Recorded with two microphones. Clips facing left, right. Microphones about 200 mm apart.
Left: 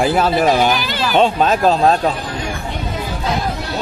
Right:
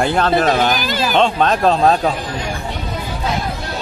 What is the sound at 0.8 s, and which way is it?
Speech, 45° right (ahead or behind).